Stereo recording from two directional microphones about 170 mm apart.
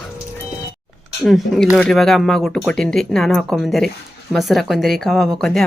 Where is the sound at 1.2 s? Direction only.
Centre (ahead or behind).